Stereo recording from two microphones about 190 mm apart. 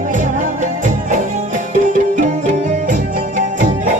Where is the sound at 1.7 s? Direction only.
45° right (ahead or behind).